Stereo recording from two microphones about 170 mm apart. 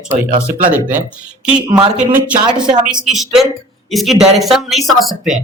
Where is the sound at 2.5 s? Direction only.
25° right (ahead or behind).